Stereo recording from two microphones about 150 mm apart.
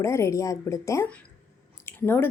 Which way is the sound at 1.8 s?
15° left (ahead or behind).